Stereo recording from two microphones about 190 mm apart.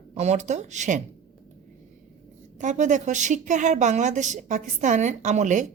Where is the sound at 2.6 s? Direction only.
40° right (ahead or behind).